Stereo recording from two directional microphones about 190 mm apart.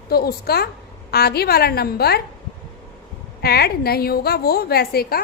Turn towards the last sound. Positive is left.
turn(degrees=55)  # may be behind; listen again after turning